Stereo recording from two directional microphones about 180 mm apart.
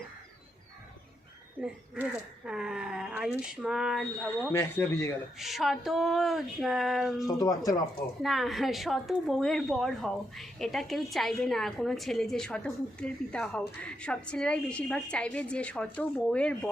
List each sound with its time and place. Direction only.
1.6 s speech: 5° right (ahead or behind)
4.5 s speech: 15° left (ahead or behind)
5.4 s a woman's voice: centre (ahead or behind)
7.3 s speech: 20° left (ahead or behind)
8.2 s a woman's voice: centre (ahead or behind)